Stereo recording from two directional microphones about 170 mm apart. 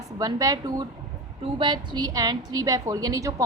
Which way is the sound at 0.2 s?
20° right (ahead or behind).